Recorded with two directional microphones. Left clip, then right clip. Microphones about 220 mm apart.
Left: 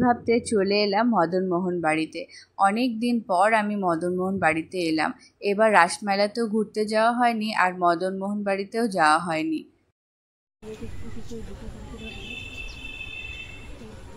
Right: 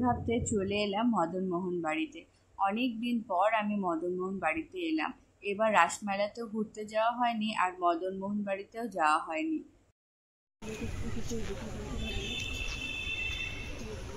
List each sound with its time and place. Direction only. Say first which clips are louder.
0.0 s speech: left 9 dB; 20° left (ahead or behind)